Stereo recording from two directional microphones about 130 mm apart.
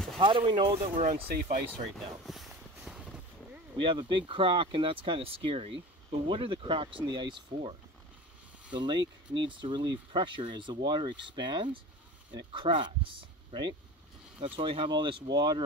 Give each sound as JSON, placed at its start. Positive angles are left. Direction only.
{"t": 0.2, "sound": "speech", "side_deg": -40}
{"t": 1.7, "sound": "vehicle", "side_deg": 0}
{"t": 3.7, "sound": "speech", "side_deg": -40}
{"t": 8.7, "sound": "speech", "side_deg": -35}